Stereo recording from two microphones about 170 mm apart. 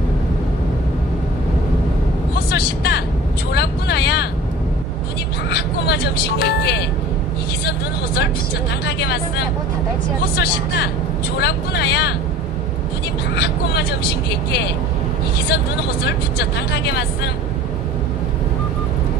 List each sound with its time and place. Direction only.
2.5 s vehicle: 70° left (ahead or behind)
5.5 s music: 75° left (ahead or behind)
8.8 s a sound: 75° left (ahead or behind)
10.3 s speech: 70° left (ahead or behind)
13.4 s speech: 70° left (ahead or behind)